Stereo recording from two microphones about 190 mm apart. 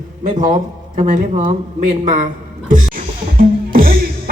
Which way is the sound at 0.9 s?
45° right (ahead or behind).